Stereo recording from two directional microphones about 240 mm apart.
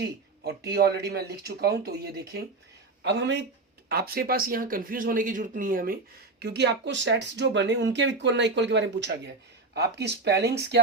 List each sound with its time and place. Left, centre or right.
0.0 s speech: right